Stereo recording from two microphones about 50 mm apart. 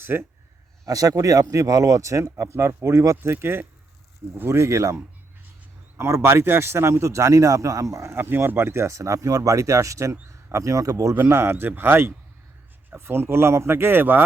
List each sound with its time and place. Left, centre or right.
0.0 s speech: right
1.5 s speech: right
2.4 s speech: right
3.3 s speech: right
4.4 s speech: right
6.0 s speech: right
6.3 s speech: right
8.1 s speech: right
11.3 s speech: right